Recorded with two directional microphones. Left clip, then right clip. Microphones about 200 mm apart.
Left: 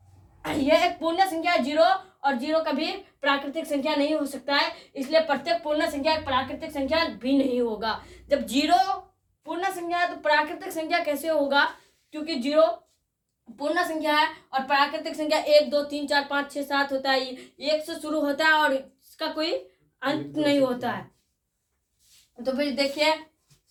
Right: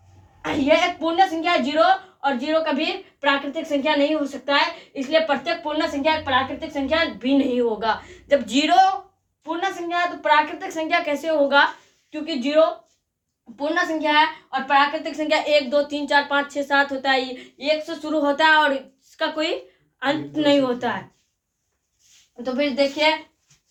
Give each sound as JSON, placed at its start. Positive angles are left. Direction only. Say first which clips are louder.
{"t": 0.4, "sound": "a woman's voice", "louder": "right 3 dB", "side_deg": -10}
{"t": 22.5, "sound": "a woman's voice", "louder": "right 6 dB", "side_deg": -10}